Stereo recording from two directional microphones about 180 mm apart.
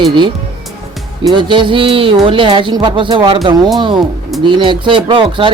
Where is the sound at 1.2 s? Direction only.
25° right (ahead or behind).